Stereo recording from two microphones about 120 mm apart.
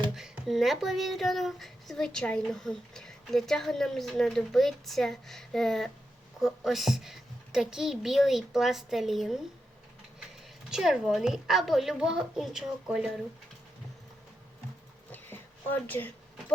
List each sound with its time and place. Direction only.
0.2 s speech: centre (ahead or behind)
10.7 s speech: 5° right (ahead or behind)
15.1 s a sound: 15° left (ahead or behind)